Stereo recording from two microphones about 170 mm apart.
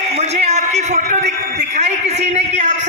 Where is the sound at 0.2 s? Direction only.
40° right (ahead or behind).